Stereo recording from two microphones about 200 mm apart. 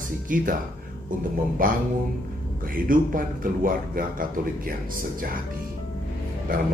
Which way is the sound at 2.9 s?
45° right (ahead or behind).